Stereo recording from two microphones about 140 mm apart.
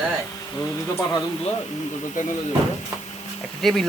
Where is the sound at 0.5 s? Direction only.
25° left (ahead or behind).